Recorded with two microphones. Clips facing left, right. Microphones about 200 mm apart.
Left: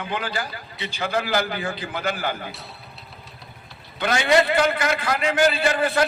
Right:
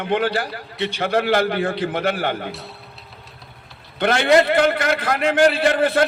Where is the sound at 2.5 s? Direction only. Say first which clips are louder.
Right 5 dB; centre (ahead or behind).